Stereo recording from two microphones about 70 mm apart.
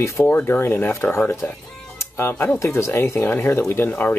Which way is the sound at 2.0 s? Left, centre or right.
Left.